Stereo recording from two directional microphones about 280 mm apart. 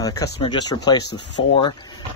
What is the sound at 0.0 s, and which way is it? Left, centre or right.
Speech, centre.